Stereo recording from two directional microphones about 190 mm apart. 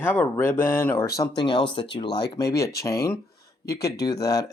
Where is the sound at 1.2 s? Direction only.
25° left (ahead or behind).